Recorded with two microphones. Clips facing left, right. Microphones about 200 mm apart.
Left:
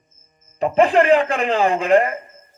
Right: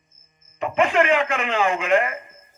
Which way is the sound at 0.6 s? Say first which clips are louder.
Left 5 dB; 35° left (ahead or behind).